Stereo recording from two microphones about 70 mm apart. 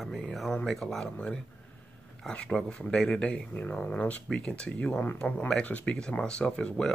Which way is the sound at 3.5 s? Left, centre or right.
Left.